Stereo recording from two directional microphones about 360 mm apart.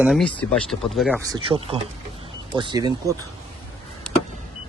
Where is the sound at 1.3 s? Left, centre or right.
Centre.